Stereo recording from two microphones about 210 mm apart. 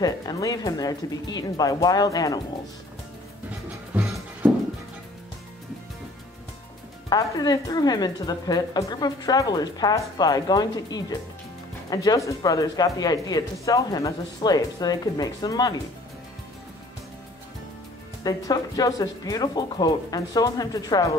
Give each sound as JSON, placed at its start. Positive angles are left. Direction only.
{"t": 0.0, "sound": "a woman's voice", "side_deg": 15}
{"t": 3.9, "sound": "music", "side_deg": -10}
{"t": 7.1, "sound": "a woman's voice", "side_deg": 15}
{"t": 18.2, "sound": "a woman's voice", "side_deg": 15}